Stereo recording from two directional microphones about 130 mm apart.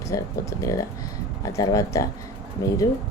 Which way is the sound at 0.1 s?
25° left (ahead or behind).